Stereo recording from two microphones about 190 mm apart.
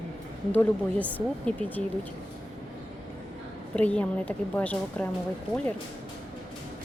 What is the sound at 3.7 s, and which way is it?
Speech, 5° left (ahead or behind).